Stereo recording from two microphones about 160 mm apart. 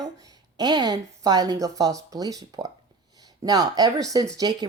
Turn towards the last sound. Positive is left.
turn(degrees=-25)  # may be behind; listen again after turning